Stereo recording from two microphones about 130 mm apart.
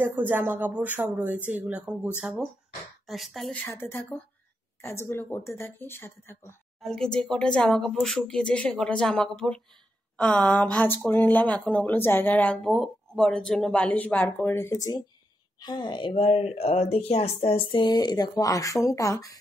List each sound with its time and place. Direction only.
0.0 s speech: 15° right (ahead or behind)
3.1 s speech: centre (ahead or behind)
3.6 s speech: 20° left (ahead or behind)
6.8 s speech: 5° left (ahead or behind)
12.6 s speech: centre (ahead or behind); by 19.3 s 25° left (ahead or behind)